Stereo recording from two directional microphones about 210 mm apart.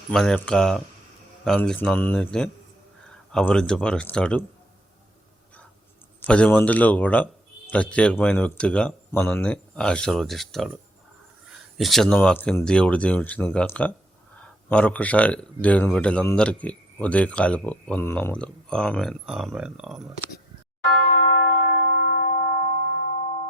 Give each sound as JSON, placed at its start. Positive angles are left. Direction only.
{"t": 0.1, "sound": "speech", "side_deg": 5}
{"t": 6.1, "sound": "speech", "side_deg": 5}
{"t": 11.8, "sound": "speech", "side_deg": 0}
{"t": 21.1, "sound": "church bell", "side_deg": 35}